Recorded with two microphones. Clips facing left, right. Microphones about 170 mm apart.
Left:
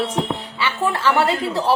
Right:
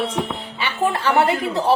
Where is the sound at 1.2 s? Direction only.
20° right (ahead or behind).